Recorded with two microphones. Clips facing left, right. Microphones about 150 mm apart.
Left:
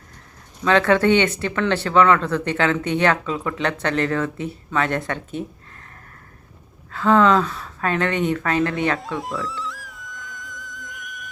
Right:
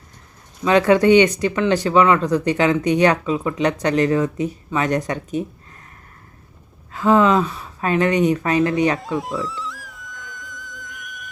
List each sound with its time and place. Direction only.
0.6 s speech: 15° right (ahead or behind)
6.9 s speech: 15° right (ahead or behind)
9.0 s music: centre (ahead or behind)